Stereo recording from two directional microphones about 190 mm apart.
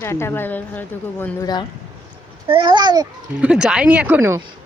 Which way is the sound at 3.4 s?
5° right (ahead or behind).